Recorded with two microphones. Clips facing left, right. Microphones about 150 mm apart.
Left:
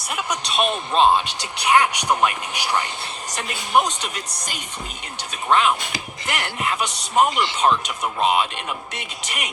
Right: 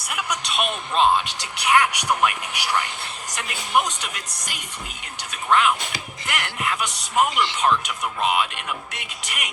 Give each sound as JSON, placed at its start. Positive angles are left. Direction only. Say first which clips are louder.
{"t": 0.1, "sound": "speech", "louder": "left 2 dB", "side_deg": 25}